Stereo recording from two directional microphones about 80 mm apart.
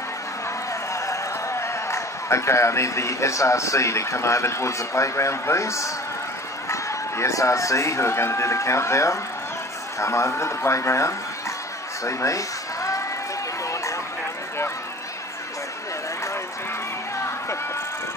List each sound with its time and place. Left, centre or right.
1.0 s a man's voice: left
12.0 s music: left